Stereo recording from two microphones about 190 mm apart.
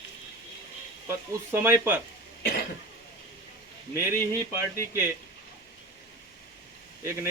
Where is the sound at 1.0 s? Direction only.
10° right (ahead or behind).